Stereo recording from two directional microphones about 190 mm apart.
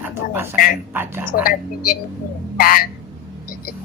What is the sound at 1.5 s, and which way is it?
Speech, 50° left (ahead or behind).